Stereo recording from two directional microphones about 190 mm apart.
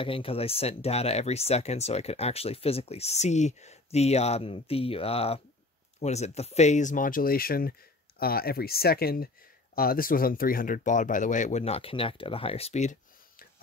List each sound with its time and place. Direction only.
0.0 s speech: 30° left (ahead or behind)